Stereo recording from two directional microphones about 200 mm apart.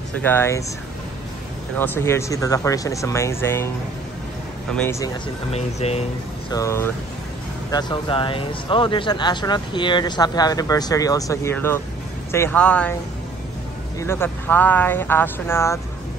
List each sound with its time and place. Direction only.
0.2 s speech: 10° left (ahead or behind)
1.8 s speech: 10° left (ahead or behind)
4.7 s speech: 10° left (ahead or behind)
5.5 s speech: 30° left (ahead or behind)
6.5 s speech: 15° left (ahead or behind)
13.9 s speech: 10° left (ahead or behind)